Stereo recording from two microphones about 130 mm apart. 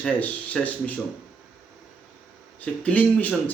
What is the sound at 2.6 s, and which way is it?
Speech, 10° left (ahead or behind).